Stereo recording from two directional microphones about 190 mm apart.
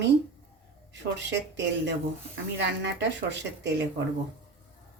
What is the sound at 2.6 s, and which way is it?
Dishes, 65° right (ahead or behind).